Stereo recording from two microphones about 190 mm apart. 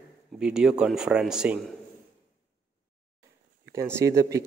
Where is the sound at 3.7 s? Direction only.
15° right (ahead or behind).